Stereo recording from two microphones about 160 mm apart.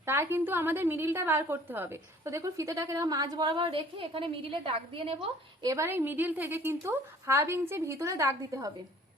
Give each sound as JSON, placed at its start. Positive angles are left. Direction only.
{"t": 0.0, "sound": "a woman's voice", "side_deg": -15}
{"t": 5.6, "sound": "a woman's voice", "side_deg": -15}